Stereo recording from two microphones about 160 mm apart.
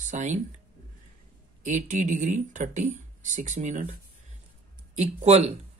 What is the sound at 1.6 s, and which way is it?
Speech, 50° right (ahead or behind).